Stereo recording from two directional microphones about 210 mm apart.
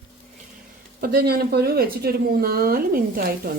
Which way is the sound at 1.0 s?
50° right (ahead or behind).